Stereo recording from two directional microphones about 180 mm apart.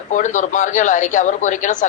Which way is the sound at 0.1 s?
45° left (ahead or behind).